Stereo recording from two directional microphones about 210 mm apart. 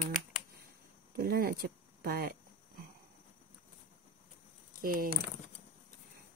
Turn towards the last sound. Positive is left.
turn(degrees=-40)  # may be behind; listen again after turning